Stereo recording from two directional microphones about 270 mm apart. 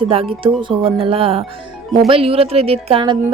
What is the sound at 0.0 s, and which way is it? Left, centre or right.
Speech, centre.